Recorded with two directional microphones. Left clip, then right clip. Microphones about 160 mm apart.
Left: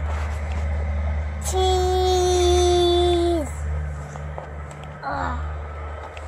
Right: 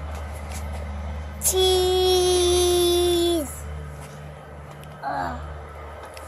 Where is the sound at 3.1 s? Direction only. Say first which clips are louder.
Left 1 dB; 15° right (ahead or behind).